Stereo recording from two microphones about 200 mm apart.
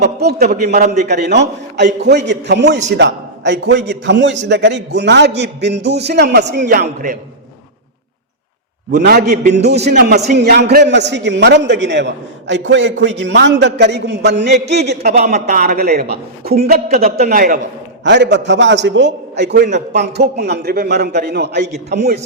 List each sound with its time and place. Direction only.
0.0 s a man's voice: 55° right (ahead or behind); by 1.0 s 35° right (ahead or behind)
1.0 s a man's voice: 55° right (ahead or behind)
8.9 s a man's voice: 50° right (ahead or behind)
9.2 s a man's voice: 40° right (ahead or behind)
9.6 s a man's voice: 55° right (ahead or behind)
10.3 s a man's voice: 55° right (ahead or behind)
15.3 s a man's voice: 40° right (ahead or behind)
16.7 s a man's voice: 35° right (ahead or behind)
18.0 s a man's voice: 60° right (ahead or behind)